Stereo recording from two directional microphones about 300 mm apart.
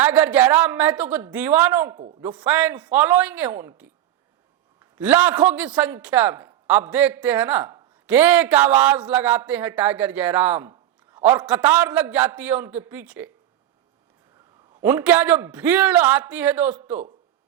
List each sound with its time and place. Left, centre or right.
0.0 s a man's voice: centre
14.8 s a man's voice: centre